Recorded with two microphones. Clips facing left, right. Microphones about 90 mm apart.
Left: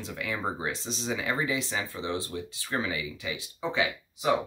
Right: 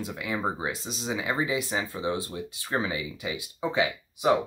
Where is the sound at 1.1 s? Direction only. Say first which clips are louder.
Right 2 dB; 20° right (ahead or behind).